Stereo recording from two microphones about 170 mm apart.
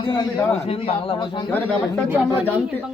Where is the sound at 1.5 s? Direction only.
10° left (ahead or behind).